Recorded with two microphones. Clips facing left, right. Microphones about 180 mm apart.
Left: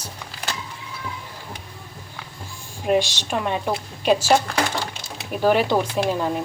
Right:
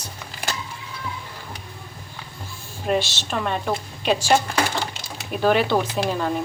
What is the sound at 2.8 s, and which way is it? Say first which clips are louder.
Speech: left 3 dB; 10° left (ahead or behind).